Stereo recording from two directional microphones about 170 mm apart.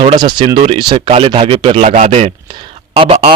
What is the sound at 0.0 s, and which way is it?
A man's voice, 30° right (ahead or behind).